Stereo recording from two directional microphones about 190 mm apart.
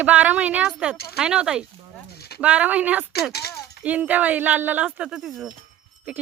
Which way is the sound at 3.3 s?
55° left (ahead or behind).